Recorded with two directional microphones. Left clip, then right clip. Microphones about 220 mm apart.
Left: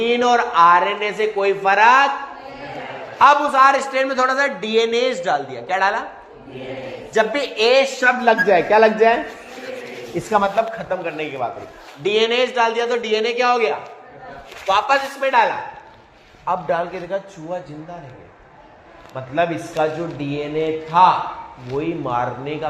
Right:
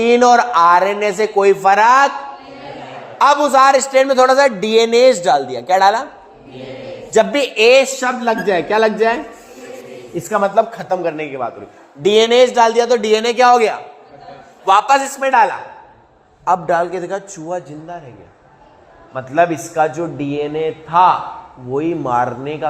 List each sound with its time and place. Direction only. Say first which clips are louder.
0.0 s a man's voice: right 6 dB; 55° right (ahead or behind)
3.2 s a man's voice: right 2 dB; 50° right (ahead or behind)
7.1 s a man's voice: right 5 dB; 50° right (ahead or behind)
10.3 s a man's voice: right 3 dB; 45° right (ahead or behind)
16.5 s a man's voice: right 6 dB; 55° right (ahead or behind)
19.1 s a man's voice: right 6 dB; 50° right (ahead or behind)
21.7 s a man's voice: right 5 dB; 50° right (ahead or behind)